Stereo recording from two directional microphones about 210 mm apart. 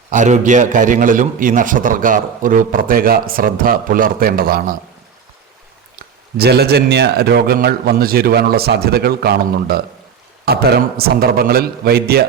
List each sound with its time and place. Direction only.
0.1 s a man's voice: 35° right (ahead or behind)
6.0 s a man's voice: 50° right (ahead or behind)